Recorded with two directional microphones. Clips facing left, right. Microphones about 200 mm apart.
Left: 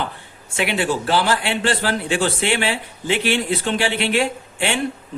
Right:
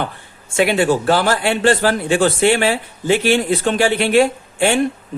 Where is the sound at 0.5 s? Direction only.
45° right (ahead or behind).